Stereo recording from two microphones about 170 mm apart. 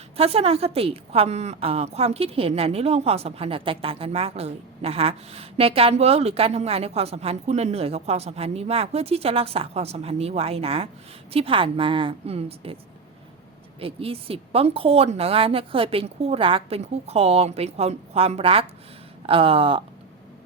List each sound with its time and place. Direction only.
0.2 s a woman's voice: 35° right (ahead or behind)